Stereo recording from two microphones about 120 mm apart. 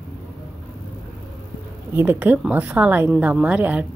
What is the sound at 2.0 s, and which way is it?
A woman's voice, 15° right (ahead or behind).